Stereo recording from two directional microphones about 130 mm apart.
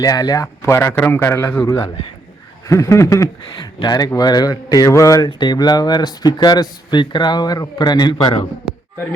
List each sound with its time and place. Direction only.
0.0 s a man's voice: 30° left (ahead or behind)
0.4 s a man's voice: 20° left (ahead or behind)